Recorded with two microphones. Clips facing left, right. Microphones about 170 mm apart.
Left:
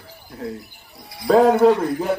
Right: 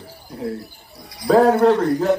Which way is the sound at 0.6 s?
25° left (ahead or behind).